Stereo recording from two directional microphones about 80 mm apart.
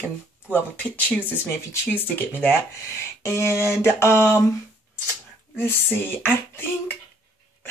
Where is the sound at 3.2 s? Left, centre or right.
Left.